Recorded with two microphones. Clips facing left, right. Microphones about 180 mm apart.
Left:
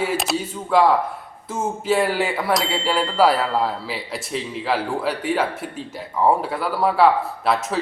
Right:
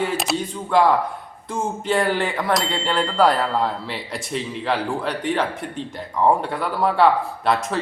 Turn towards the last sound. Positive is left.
turn(degrees=0)  # may be behind; listen again after turning